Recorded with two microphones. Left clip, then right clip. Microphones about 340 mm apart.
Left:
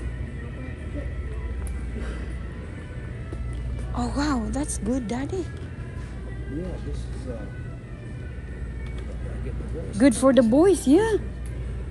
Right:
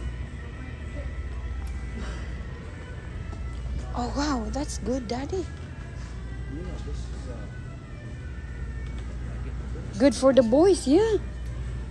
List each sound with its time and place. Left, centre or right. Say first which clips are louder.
3.9 s music: left 2 dB; left
9.9 s speech: left 1 dB; left